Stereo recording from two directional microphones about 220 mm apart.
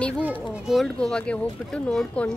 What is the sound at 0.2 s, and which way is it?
Speech, 5° right (ahead or behind).